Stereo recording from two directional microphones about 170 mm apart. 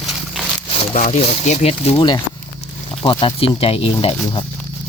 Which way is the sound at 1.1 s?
40° left (ahead or behind).